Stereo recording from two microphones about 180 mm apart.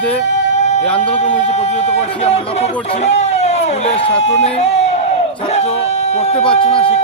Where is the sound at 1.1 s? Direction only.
40° left (ahead or behind).